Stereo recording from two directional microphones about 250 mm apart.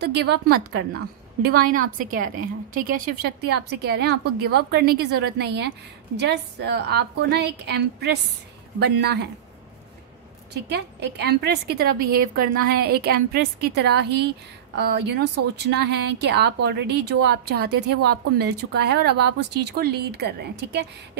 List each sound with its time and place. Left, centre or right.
0.0 s speech: right
10.5 s speech: right